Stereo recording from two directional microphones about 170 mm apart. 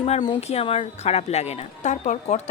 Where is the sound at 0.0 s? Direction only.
35° left (ahead or behind).